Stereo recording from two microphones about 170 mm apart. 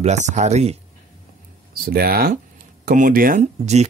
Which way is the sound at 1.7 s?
60° right (ahead or behind).